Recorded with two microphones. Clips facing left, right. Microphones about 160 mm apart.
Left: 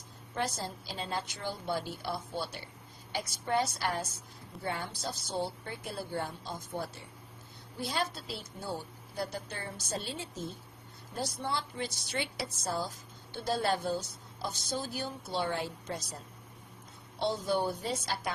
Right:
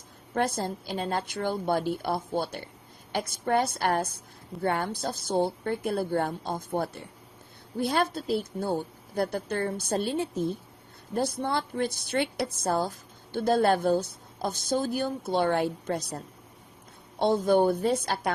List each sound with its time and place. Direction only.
0.3 s a woman's voice: 55° right (ahead or behind)